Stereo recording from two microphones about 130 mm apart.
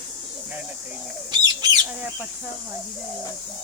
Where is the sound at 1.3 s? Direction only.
30° right (ahead or behind).